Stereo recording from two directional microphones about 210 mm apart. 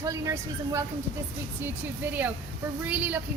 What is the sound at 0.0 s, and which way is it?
Speech, 15° right (ahead or behind).